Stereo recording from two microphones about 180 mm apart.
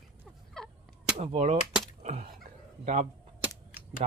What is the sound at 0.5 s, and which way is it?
Fowl, centre (ahead or behind).